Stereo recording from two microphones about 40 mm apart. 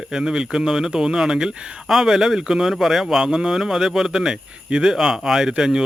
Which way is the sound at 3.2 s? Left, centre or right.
Centre.